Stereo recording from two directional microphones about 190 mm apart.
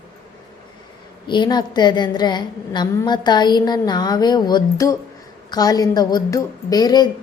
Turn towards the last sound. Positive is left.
turn(degrees=20)  # may be behind; listen again after turning